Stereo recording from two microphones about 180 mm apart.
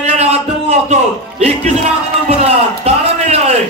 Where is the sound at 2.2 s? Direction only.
35° right (ahead or behind).